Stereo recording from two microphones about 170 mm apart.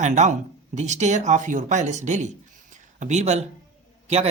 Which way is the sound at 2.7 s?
45° right (ahead or behind).